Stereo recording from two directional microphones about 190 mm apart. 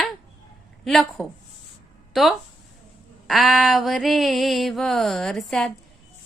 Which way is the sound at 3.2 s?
Centre (ahead or behind).